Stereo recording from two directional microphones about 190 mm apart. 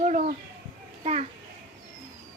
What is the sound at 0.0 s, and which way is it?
Speech, 40° right (ahead or behind).